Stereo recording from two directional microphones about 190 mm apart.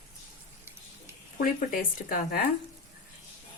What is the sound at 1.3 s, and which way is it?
Speech, 45° left (ahead or behind).